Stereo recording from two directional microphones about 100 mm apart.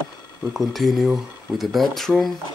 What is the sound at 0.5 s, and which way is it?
Speech, centre (ahead or behind).